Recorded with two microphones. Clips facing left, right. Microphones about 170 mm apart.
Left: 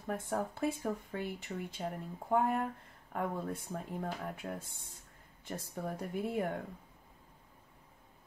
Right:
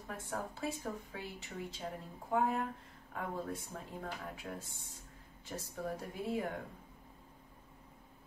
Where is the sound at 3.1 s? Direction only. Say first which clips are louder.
Left 3 dB; 55° left (ahead or behind).